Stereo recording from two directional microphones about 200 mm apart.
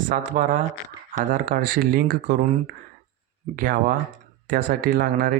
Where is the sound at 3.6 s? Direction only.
45° right (ahead or behind).